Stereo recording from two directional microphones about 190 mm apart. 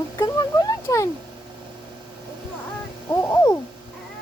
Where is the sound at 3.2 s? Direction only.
15° left (ahead or behind).